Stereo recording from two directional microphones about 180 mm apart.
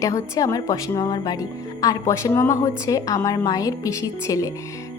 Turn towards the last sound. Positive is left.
turn(degrees=20)  # may be behind; listen again after turning